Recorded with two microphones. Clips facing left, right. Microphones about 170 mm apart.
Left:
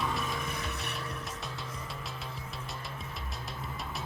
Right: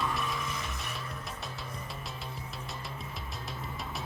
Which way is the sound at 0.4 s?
60° left (ahead or behind).